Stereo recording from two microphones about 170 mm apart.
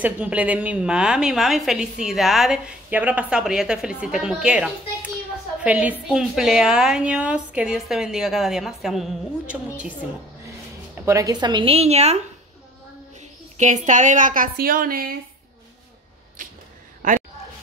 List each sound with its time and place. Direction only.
0.0 s a woman's voice: 10° right (ahead or behind)
11.1 s a woman's voice: 20° right (ahead or behind); by 12.2 s 40° right (ahead or behind)
13.2 s a woman's voice: 45° right (ahead or behind)
16.4 s a sound: 50° right (ahead or behind)